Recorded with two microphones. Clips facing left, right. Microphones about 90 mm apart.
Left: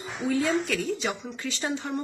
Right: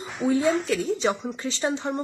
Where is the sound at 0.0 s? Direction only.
25° right (ahead or behind).